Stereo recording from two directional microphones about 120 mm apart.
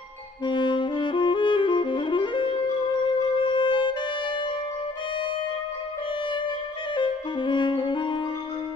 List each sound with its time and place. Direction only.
0.5 s saxophone: 40° left (ahead or behind)
3.2 s music: 45° left (ahead or behind)
7.0 s music: 45° left (ahead or behind)